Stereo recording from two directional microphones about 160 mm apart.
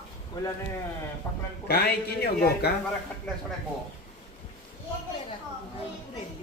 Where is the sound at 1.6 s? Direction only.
85° left.